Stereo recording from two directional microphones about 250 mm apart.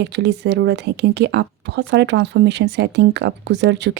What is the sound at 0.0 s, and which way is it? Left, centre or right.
Speech, right.